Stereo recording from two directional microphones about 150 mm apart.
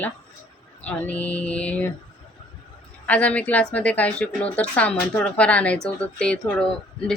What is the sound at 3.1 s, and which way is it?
Speech, 10° left (ahead or behind).